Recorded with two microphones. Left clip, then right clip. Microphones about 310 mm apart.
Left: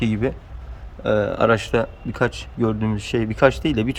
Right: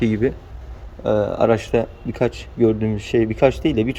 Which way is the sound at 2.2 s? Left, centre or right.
Left.